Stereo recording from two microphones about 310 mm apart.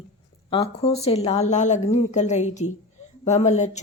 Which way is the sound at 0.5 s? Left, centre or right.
Centre.